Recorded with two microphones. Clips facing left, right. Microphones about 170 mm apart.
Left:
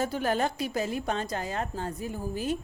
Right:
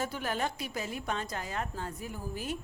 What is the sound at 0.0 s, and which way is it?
A woman's voice, 35° left (ahead or behind).